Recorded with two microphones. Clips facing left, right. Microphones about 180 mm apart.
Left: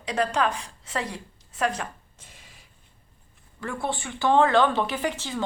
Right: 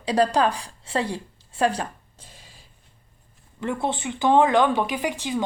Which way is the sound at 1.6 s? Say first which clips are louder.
Right 4 dB; 35° right (ahead or behind).